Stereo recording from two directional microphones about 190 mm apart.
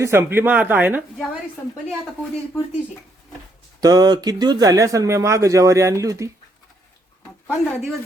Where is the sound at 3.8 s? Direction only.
20° right (ahead or behind).